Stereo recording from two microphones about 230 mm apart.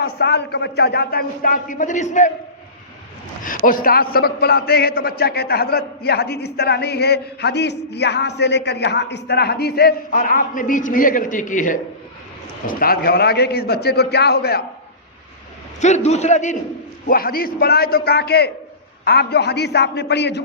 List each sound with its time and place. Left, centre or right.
0.0 s a man's voice: left
3.4 s a man's voice: left
15.8 s a man's voice: left